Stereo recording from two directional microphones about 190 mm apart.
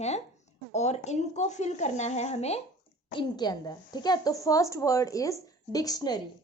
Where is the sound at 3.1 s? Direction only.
20° left (ahead or behind).